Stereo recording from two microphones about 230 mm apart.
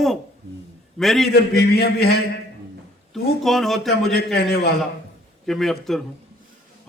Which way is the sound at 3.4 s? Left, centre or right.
Centre.